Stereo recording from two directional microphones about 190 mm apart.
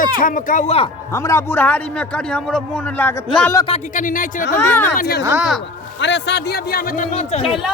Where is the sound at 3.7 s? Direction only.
45° left (ahead or behind).